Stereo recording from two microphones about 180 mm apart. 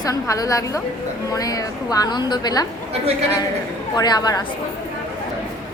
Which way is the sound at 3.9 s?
20° left (ahead or behind).